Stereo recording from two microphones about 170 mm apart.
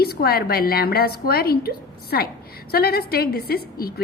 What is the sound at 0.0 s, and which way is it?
A woman's voice, 65° left (ahead or behind).